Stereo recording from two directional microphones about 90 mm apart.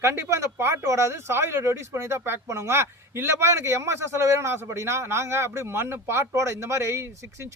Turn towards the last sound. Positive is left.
turn(degrees=-30)  # may be behind; listen again after turning